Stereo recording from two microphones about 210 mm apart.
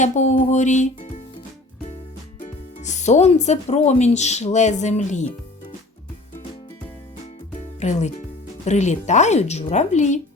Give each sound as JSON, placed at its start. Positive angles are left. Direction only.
{"t": 0.0, "sound": "speech", "side_deg": 35}
{"t": 2.8, "sound": "speech", "side_deg": 35}
{"t": 7.8, "sound": "speech", "side_deg": 35}